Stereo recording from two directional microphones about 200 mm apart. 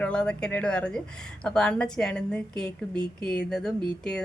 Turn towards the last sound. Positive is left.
turn(degrees=5)  # may be behind; listen again after turning